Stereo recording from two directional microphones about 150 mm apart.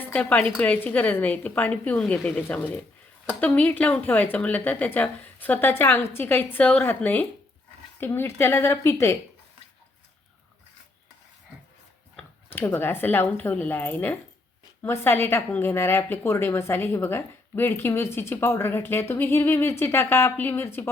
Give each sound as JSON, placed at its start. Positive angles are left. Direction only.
{"t": 0.0, "sound": "a woman's voice", "side_deg": 10}
{"t": 12.1, "sound": "speech", "side_deg": 15}